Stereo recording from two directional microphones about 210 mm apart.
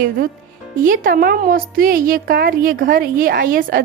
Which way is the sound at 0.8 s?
40° right (ahead or behind).